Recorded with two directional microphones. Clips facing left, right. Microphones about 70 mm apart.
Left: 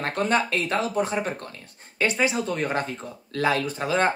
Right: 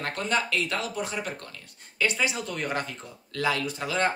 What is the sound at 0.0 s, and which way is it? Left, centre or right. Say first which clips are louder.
Speech: left 5 dB; left.